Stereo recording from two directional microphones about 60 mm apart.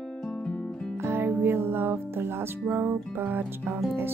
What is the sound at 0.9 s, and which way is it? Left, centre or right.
Music, right.